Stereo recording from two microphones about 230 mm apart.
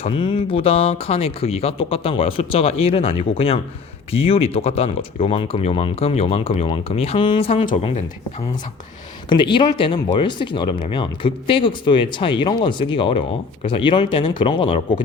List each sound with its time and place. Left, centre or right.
0.0 s speech: left